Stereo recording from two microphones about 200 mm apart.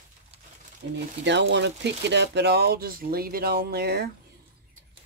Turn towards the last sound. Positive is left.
turn(degrees=-55)  # may be behind; listen again after turning